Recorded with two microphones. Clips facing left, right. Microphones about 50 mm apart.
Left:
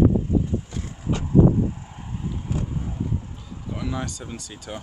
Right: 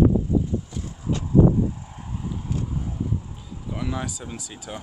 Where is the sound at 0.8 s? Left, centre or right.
Left.